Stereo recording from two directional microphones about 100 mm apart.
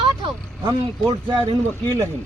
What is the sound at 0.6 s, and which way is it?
Speech, 45° right (ahead or behind).